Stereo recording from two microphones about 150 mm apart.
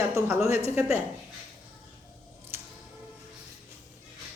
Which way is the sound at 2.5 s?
15° right (ahead or behind).